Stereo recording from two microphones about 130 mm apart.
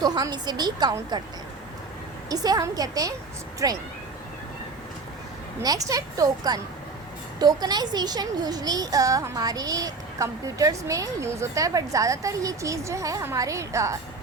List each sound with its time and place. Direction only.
0.0 s a woman's voice: 30° right (ahead or behind)
2.3 s a child's voice: 30° right (ahead or behind)
5.6 s a child's voice: 30° right (ahead or behind)